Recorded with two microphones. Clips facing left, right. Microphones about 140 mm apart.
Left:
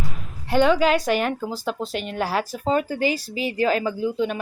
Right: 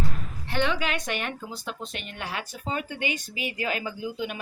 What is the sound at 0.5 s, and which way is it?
Speech, 40° left (ahead or behind).